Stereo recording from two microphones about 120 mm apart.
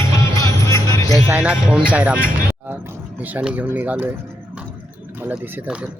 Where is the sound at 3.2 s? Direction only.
15° right (ahead or behind).